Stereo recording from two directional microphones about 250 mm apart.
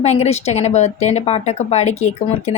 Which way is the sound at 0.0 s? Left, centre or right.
Left.